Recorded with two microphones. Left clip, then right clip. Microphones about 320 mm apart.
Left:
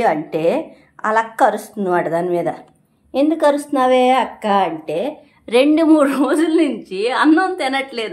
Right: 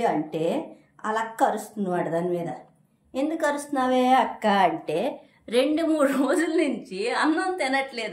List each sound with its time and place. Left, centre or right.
0.0 s speech: centre